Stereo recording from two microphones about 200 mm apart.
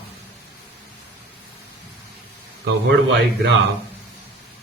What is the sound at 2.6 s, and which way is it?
Speech, 60° right (ahead or behind).